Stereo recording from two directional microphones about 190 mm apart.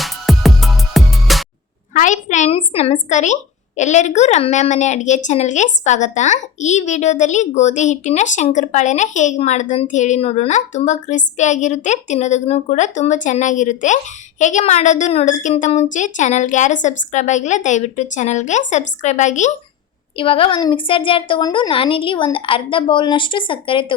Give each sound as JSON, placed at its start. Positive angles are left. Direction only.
{"t": 0.0, "sound": "music", "side_deg": 0}
{"t": 1.9, "sound": "a sound", "side_deg": 40}
{"t": 3.8, "sound": "a woman's voice", "side_deg": 40}
{"t": 20.1, "sound": "a woman's voice", "side_deg": 30}